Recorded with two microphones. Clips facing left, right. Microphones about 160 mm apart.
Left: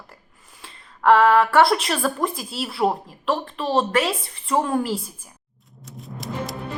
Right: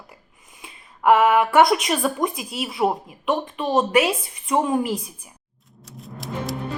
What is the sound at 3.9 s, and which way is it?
A woman's voice, centre (ahead or behind).